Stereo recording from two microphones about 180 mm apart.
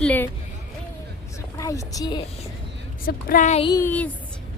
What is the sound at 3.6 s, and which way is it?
Speech, 20° left (ahead or behind).